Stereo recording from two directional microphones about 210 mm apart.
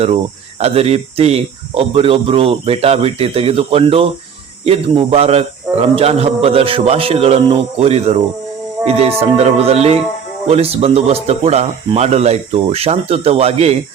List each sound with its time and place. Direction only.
0.6 s speech: 30° right (ahead or behind)